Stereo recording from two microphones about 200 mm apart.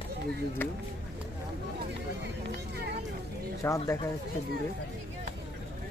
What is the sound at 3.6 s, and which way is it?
Speech, 15° left (ahead or behind).